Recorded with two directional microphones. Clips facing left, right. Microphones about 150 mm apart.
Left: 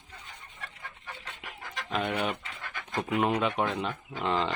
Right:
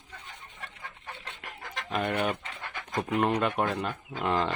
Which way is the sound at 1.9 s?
Centre (ahead or behind).